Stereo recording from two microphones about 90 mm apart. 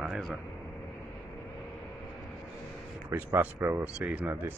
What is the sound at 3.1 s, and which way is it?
Speech, 25° right (ahead or behind).